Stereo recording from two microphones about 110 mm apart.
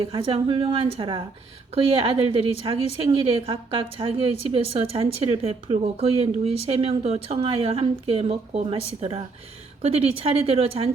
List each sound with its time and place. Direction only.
0.0 s a woman's voice: 55° right (ahead or behind)